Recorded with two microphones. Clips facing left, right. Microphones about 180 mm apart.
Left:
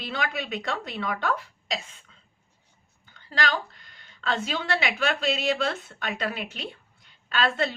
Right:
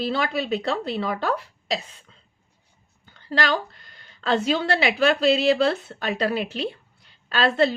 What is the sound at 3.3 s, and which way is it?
Speech, 35° right (ahead or behind).